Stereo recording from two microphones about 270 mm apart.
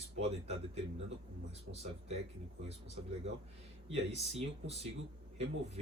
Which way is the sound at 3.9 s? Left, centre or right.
Right.